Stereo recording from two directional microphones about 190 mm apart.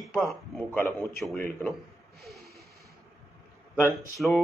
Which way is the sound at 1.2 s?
5° left (ahead or behind).